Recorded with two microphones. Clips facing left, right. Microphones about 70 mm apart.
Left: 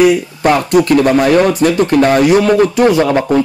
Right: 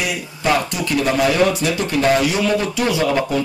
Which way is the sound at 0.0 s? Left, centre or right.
Left.